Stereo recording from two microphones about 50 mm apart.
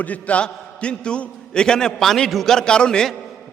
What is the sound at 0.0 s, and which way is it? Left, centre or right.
A man's voice, left.